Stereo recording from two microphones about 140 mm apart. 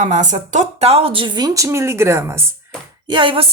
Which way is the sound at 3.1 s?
35° right (ahead or behind).